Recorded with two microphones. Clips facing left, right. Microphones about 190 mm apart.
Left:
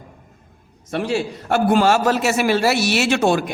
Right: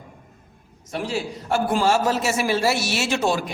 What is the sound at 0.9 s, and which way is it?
A man's voice, 65° left (ahead or behind).